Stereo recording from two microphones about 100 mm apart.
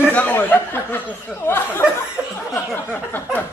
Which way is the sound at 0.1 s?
20° left (ahead or behind).